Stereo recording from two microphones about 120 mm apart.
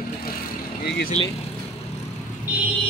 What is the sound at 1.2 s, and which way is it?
Speech, 55° left (ahead or behind).